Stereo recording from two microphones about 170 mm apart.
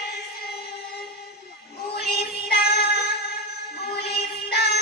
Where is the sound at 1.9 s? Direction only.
65° left (ahead or behind).